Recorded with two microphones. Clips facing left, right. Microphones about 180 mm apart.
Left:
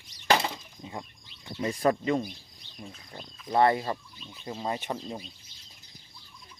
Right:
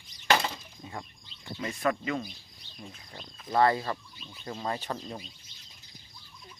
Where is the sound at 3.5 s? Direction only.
25° left (ahead or behind).